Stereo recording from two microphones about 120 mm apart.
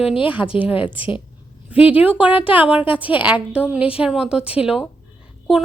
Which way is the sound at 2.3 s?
50° left (ahead or behind).